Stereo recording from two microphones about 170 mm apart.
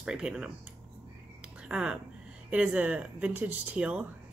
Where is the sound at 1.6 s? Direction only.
5° right (ahead or behind).